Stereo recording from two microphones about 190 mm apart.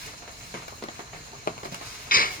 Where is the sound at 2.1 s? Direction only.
50° left (ahead or behind).